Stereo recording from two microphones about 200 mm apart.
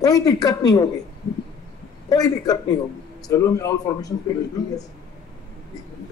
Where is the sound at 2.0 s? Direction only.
20° left (ahead or behind).